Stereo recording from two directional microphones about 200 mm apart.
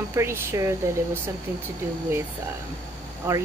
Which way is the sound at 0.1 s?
10° right (ahead or behind).